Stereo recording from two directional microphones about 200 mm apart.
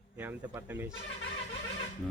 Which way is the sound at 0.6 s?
10° right (ahead or behind).